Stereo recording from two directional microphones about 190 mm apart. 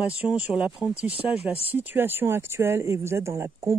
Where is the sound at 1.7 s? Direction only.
10° right (ahead or behind).